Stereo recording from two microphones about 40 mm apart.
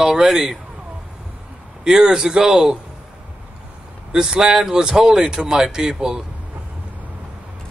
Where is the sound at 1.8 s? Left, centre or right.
Centre.